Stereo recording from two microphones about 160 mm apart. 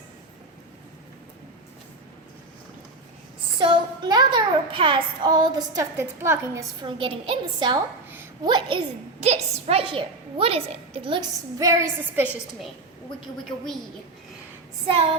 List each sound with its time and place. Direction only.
3.6 s child singing: 30° right (ahead or behind)
6.8 s a woman's voice: 35° right (ahead or behind)
9.2 s a woman's voice: 40° right (ahead or behind)
11.6 s a woman's voice: 20° right (ahead or behind)